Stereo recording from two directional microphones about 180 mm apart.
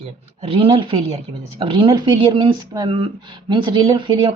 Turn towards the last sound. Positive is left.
turn(degrees=-30)  # may be behind; listen again after turning